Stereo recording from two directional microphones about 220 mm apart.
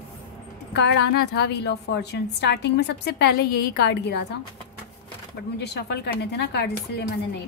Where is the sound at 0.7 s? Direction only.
50° left (ahead or behind).